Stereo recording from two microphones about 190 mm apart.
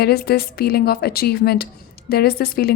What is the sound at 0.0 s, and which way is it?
A woman's voice, 55° left (ahead or behind).